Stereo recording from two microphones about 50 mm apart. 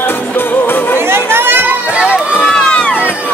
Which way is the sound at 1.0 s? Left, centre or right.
Right.